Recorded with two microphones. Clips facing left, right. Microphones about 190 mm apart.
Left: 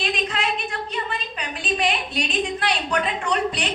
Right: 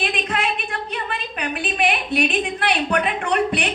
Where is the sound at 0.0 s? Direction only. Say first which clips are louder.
Right 2 dB; 55° right (ahead or behind).